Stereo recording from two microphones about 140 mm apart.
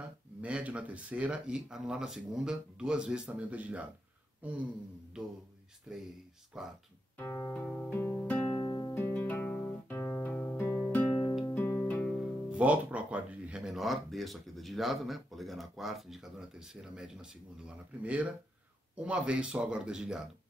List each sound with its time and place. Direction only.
0.4 s speech: 10° right (ahead or behind)
5.9 s speech: 5° right (ahead or behind)
7.2 s music: 20° left (ahead or behind)
8.5 s music: 30° left (ahead or behind)
8.9 s music: 15° left (ahead or behind)
12.4 s speech: 10° right (ahead or behind)